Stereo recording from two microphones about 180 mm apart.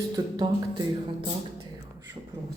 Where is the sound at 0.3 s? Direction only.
25° right (ahead or behind).